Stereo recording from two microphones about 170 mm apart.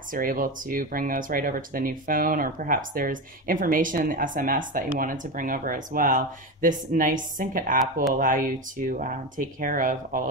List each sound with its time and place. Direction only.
0.1 s speech: 55° right (ahead or behind)